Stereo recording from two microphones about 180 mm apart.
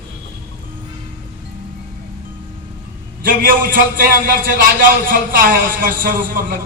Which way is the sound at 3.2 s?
50° right (ahead or behind).